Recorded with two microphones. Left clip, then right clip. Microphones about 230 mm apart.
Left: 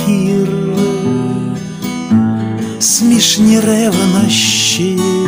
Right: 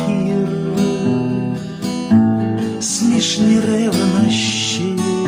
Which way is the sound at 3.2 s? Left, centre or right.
Left.